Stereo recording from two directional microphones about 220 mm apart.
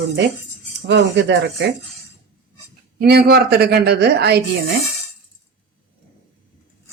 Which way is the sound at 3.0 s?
45° right (ahead or behind).